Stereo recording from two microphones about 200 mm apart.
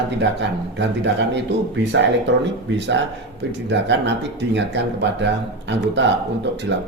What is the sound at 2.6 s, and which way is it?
Speech, 60° right (ahead or behind).